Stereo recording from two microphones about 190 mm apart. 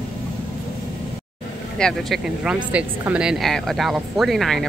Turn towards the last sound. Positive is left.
turn(degrees=0)  # may be behind; listen again after turning